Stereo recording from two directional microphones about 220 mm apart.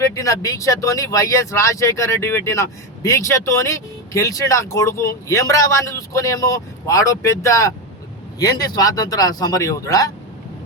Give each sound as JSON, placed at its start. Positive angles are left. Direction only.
{"t": 0.0, "sound": "speech", "side_deg": 15}